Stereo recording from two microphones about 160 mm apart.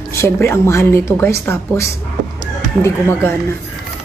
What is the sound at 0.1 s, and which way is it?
A woman's voice, 15° left (ahead or behind).